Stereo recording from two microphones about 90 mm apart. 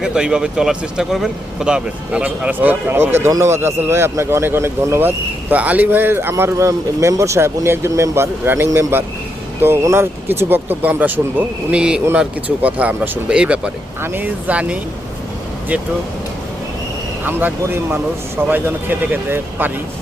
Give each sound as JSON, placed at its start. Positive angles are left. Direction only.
{"t": 0.0, "sound": "a man's voice", "side_deg": -10}
{"t": 18.4, "sound": "a man's voice", "side_deg": -20}